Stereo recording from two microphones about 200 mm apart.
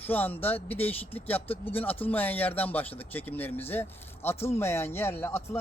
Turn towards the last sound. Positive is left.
turn(degrees=10)  # may be behind; listen again after turning